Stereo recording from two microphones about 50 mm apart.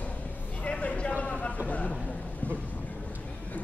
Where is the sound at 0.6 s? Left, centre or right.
Left.